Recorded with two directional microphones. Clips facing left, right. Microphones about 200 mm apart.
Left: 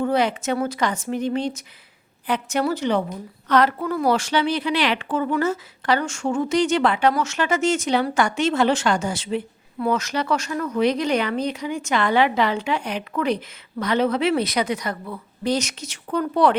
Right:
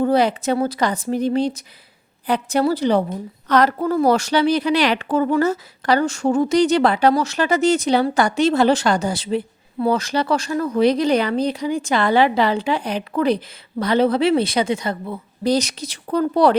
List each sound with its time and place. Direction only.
0.0 s a woman's voice: 35° right (ahead or behind)